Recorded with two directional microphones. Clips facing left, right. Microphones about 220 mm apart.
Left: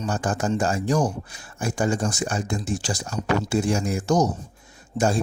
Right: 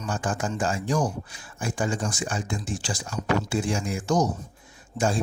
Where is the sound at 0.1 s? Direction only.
40° left (ahead or behind).